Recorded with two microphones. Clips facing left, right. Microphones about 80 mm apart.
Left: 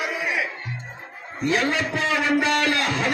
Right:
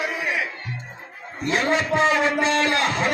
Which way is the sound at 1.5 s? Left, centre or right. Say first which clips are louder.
Right 3 dB; right.